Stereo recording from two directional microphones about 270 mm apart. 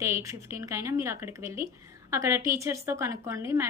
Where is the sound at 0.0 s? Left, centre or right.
Centre.